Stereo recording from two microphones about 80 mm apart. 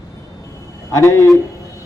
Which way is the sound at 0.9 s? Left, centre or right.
Left.